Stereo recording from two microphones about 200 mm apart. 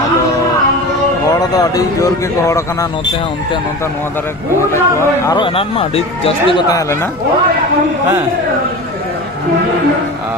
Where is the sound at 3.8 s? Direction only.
10° left (ahead or behind); by 6.6 s 30° left (ahead or behind).